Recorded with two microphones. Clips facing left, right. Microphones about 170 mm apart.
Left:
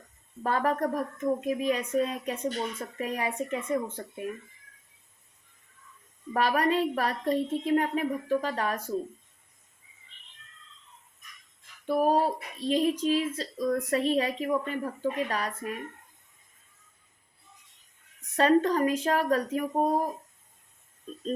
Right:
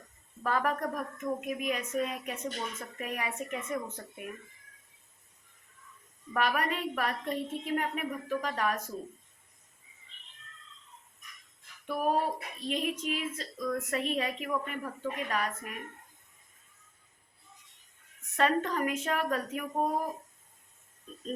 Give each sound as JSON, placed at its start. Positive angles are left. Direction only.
{"t": 0.4, "sound": "speech", "side_deg": 30}
{"t": 6.3, "sound": "speech", "side_deg": 35}
{"t": 11.9, "sound": "speech", "side_deg": 30}
{"t": 18.3, "sound": "speech", "side_deg": 35}